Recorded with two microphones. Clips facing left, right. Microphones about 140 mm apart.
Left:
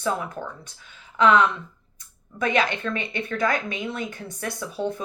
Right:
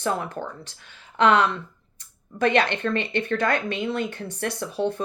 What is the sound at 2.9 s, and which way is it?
Speech, 65° right (ahead or behind).